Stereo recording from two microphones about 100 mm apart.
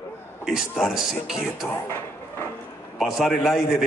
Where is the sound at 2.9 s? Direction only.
Centre (ahead or behind).